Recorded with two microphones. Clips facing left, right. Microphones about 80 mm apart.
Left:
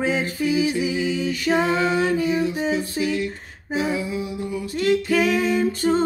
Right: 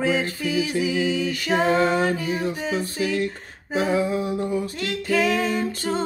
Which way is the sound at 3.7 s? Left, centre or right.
Right.